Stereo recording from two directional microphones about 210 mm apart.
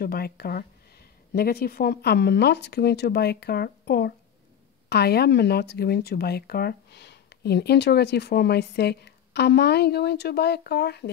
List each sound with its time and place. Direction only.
0.0 s speech: 45° left (ahead or behind)